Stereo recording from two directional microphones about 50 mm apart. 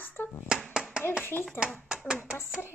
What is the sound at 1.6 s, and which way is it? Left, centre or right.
Speech, left.